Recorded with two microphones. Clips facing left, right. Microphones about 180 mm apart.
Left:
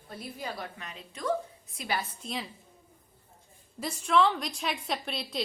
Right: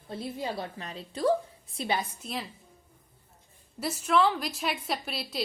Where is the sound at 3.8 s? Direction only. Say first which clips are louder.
Even; 5° right (ahead or behind).